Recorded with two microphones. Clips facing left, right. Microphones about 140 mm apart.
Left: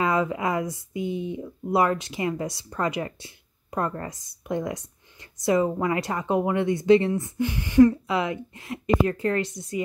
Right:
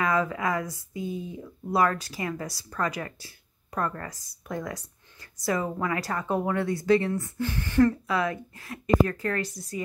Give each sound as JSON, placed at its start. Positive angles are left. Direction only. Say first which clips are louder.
{"t": 0.0, "sound": "speech", "louder": "left 2 dB", "side_deg": 20}